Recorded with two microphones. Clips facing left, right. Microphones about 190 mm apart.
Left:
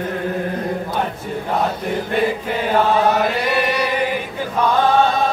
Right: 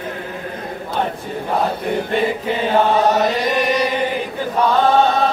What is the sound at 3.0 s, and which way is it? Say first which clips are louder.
Chant: right 1 dB; 40° right (ahead or behind).